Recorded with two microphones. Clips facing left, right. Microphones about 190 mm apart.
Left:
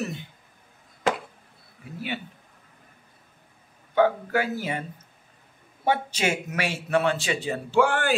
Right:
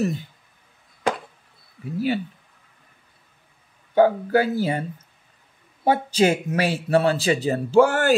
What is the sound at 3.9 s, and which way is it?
Speech, 35° right (ahead or behind).